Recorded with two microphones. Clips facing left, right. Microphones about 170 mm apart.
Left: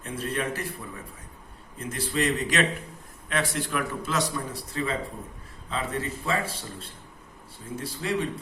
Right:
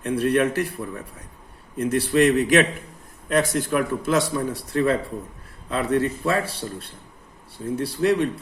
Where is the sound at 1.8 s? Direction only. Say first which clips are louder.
Right 10 dB; 65° right (ahead or behind).